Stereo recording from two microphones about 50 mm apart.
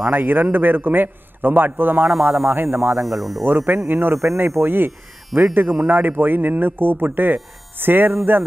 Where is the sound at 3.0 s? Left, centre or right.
Centre.